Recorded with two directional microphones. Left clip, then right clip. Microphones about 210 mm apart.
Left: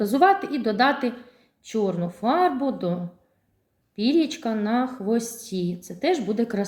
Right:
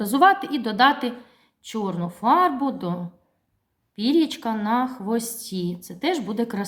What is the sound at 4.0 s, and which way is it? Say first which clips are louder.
A woman's voice: right 1 dB; 50° right (ahead or behind).